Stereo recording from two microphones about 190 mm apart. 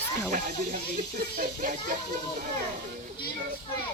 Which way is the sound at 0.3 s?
40° right (ahead or behind).